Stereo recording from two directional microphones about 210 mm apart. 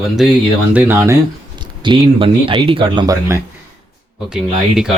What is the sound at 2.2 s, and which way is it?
Speech, 25° right (ahead or behind).